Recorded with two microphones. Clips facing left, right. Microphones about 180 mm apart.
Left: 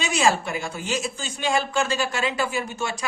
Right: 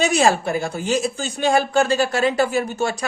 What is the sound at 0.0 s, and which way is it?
Speech, 40° right (ahead or behind).